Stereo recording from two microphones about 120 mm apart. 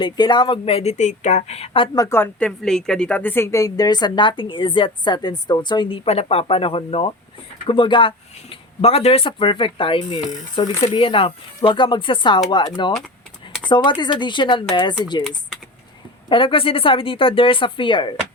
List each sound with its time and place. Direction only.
0.0 s speech: 40° left (ahead or behind)
2.0 s speech: 20° left (ahead or behind)
2.4 s a woman's voice: 5° left (ahead or behind); by 6.0 s 40° left (ahead or behind)
6.1 s a woman's voice: 55° left (ahead or behind); by 14.9 s 40° left (ahead or behind)
16.3 s speech: 45° left (ahead or behind)